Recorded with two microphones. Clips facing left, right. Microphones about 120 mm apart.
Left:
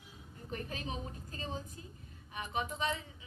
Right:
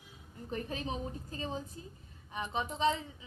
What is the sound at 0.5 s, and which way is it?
A woman's voice, 30° right (ahead or behind).